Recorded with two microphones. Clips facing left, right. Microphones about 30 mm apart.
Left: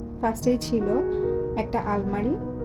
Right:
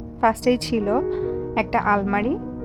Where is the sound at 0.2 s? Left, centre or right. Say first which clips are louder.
Right 5 dB; right.